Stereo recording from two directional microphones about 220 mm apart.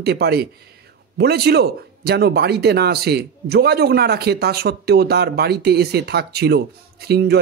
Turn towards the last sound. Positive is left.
turn(degrees=-45)  # may be behind; listen again after turning